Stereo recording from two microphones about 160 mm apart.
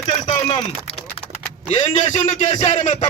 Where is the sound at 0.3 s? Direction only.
35° left (ahead or behind).